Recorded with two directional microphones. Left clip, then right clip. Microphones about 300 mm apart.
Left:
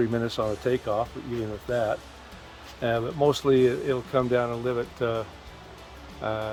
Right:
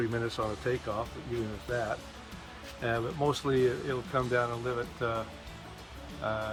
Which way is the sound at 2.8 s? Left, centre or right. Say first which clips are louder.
Left 7 dB; left.